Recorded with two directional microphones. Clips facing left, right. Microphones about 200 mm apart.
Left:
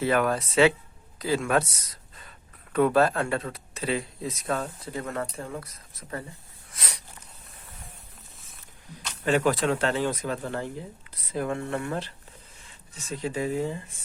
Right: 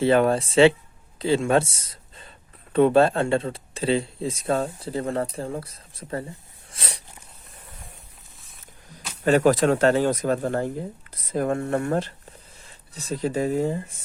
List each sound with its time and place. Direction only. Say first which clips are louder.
0.0 s speech: right 5 dB; 30° right (ahead or behind)
6.7 s a sound: right 4 dB; 30° right (ahead or behind)
9.2 s speech: right 5 dB; 40° right (ahead or behind)